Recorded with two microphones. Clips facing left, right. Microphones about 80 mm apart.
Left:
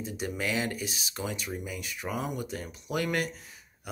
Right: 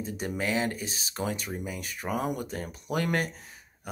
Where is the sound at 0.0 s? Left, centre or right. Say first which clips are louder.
Right 2 dB; right.